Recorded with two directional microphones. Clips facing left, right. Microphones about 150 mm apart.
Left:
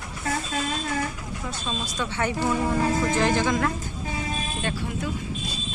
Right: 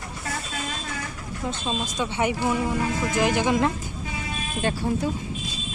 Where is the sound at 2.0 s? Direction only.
15° right (ahead or behind).